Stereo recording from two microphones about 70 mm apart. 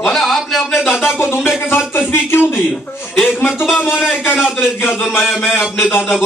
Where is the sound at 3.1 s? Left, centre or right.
Centre.